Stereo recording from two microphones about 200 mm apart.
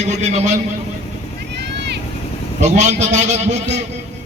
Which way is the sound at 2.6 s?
35° right (ahead or behind).